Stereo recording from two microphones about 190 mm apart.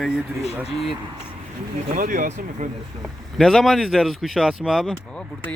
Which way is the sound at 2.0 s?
45° right (ahead or behind).